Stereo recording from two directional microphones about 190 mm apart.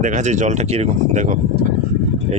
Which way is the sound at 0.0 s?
40° right (ahead or behind).